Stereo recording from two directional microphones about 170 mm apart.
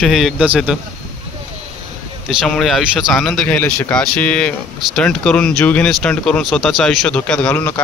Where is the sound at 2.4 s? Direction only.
Centre (ahead or behind).